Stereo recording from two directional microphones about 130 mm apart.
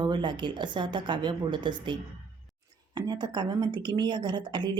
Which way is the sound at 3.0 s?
35° right (ahead or behind).